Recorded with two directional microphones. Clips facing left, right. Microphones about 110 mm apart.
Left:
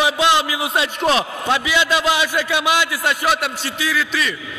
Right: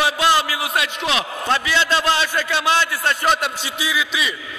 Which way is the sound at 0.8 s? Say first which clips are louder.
Left 5 dB; 35° left (ahead or behind).